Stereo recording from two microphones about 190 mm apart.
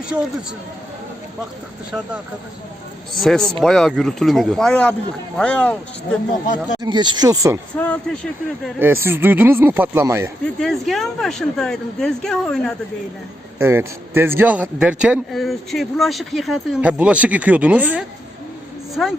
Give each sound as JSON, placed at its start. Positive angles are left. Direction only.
{"t": 0.1, "sound": "a man's voice", "side_deg": -15}
{"t": 3.2, "sound": "a woman's voice", "side_deg": 5}
{"t": 6.8, "sound": "speech", "side_deg": -25}
{"t": 7.8, "sound": "a woman's voice", "side_deg": 5}
{"t": 8.8, "sound": "a man's voice", "side_deg": -10}
{"t": 10.6, "sound": "a woman's voice", "side_deg": 0}
{"t": 13.6, "sound": "a man's voice", "side_deg": -10}